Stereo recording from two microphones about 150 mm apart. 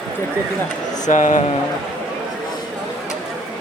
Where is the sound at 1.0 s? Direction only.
55° left (ahead or behind).